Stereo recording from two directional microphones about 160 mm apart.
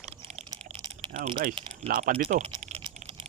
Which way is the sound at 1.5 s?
35° right (ahead or behind).